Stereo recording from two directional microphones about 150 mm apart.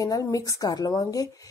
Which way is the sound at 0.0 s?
25° left (ahead or behind).